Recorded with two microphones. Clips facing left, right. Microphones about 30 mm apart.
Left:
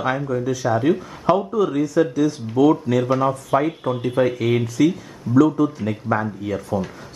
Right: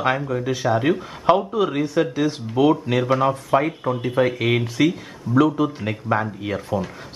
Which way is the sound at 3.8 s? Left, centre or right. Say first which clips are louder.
Left 1 dB; centre.